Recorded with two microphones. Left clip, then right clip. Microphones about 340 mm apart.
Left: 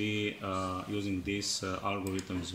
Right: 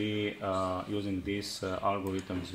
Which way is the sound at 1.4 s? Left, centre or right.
Right.